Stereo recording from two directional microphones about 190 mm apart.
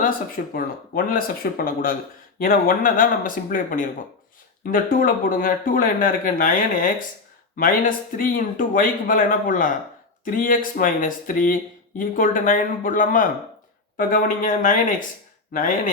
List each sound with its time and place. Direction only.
0.5 s speech: 50° left (ahead or behind)